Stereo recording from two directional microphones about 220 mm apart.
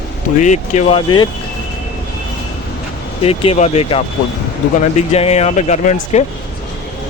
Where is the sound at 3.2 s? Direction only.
25° left (ahead or behind).